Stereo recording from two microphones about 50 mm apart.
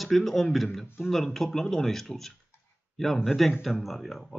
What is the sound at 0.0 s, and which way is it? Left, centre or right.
Speech, centre.